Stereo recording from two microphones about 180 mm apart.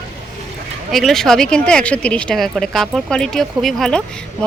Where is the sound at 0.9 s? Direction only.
Centre (ahead or behind).